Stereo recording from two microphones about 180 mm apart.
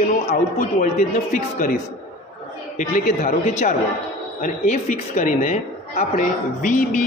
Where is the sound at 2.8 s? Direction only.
45° left (ahead or behind).